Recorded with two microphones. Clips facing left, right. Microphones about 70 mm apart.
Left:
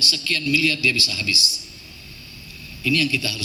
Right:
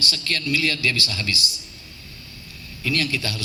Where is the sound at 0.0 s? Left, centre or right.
Right.